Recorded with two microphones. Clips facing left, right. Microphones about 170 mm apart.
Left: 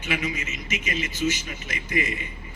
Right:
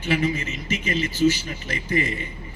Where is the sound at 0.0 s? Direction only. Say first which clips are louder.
Right 6 dB; 35° right (ahead or behind).